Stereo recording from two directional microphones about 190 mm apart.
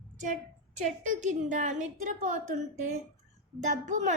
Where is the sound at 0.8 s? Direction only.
40° right (ahead or behind).